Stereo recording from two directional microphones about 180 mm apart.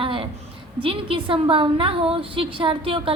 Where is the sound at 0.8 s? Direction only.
30° right (ahead or behind).